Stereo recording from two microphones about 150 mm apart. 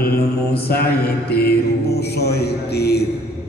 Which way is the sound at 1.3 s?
90° left.